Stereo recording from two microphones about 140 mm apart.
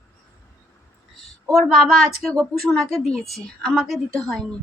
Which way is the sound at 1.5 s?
Centre (ahead or behind).